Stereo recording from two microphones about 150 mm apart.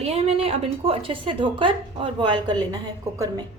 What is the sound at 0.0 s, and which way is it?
A woman's voice, 45° right (ahead or behind).